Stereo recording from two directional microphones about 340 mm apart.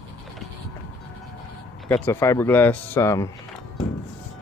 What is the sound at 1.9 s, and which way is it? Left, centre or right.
Speech, centre.